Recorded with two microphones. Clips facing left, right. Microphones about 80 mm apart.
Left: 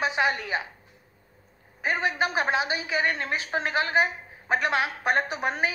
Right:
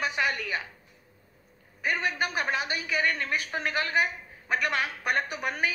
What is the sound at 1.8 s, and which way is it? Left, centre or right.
A woman's voice, left.